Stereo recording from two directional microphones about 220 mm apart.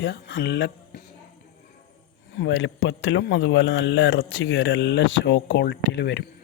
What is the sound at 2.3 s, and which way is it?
A man's voice, 60° left (ahead or behind).